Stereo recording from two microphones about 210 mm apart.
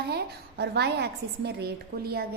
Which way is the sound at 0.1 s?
50° right (ahead or behind).